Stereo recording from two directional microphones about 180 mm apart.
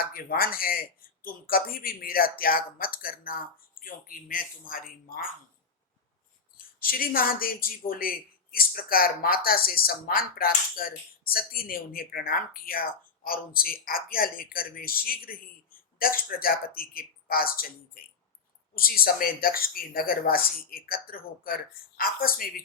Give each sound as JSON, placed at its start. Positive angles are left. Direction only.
{"t": 0.0, "sound": "speech", "side_deg": 55}
{"t": 6.8, "sound": "speech", "side_deg": 55}